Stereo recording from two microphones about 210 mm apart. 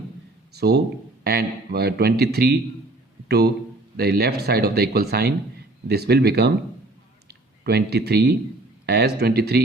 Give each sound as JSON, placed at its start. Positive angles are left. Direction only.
{"t": 0.5, "sound": "a man's voice", "side_deg": -50}